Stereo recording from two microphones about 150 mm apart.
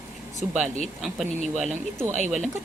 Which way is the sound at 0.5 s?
55° right (ahead or behind).